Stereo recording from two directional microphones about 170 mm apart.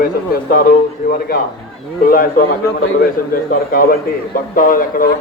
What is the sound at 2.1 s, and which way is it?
A man's voice, 55° left (ahead or behind).